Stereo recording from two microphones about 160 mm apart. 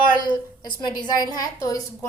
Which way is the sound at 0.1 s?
25° left (ahead or behind).